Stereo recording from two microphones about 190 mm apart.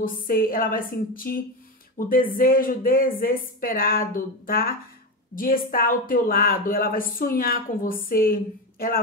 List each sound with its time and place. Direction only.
0.0 s a woman's voice: 50° left (ahead or behind)